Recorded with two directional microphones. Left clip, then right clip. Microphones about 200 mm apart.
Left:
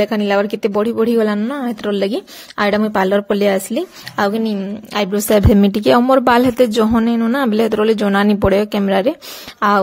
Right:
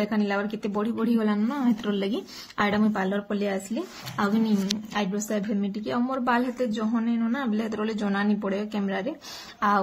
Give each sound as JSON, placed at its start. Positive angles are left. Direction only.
{"t": 0.0, "sound": "a woman's voice", "side_deg": 45}